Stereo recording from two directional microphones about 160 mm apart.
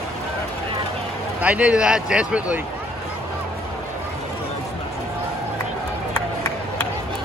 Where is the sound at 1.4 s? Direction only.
10° right (ahead or behind).